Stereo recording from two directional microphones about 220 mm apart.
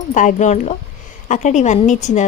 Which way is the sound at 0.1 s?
35° left (ahead or behind).